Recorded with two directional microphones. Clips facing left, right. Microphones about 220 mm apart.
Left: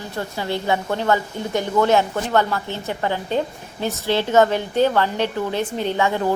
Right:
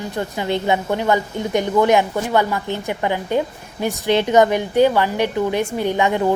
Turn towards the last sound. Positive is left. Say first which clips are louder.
# right 3 dB
turn(degrees=-15)  # may be behind; listen again after turning